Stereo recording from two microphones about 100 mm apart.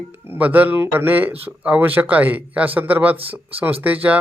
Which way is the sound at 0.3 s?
15° right (ahead or behind).